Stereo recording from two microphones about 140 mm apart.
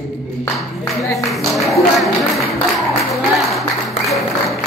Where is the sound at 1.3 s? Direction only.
Centre (ahead or behind).